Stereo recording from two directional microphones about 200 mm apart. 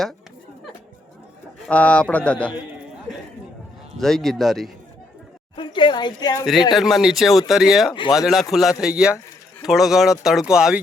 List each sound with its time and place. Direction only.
1.6 s a man's voice: 5° left (ahead or behind)
3.9 s speech: centre (ahead or behind)
5.5 s speech: 25° left (ahead or behind)
6.4 s speech: centre (ahead or behind)